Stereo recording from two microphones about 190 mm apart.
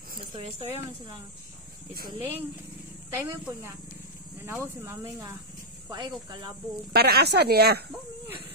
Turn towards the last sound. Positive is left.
turn(degrees=-55)  # may be behind; listen again after turning